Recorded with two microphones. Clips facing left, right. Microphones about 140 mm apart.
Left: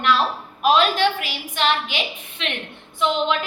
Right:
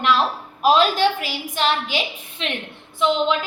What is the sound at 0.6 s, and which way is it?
A woman's voice, 35° right (ahead or behind).